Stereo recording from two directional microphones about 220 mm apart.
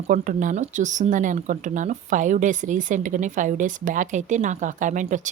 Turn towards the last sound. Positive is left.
turn(degrees=-35)  # may be behind; listen again after turning